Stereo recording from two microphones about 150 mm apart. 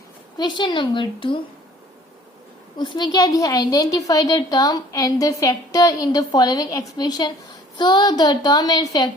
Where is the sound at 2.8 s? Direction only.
30° left (ahead or behind).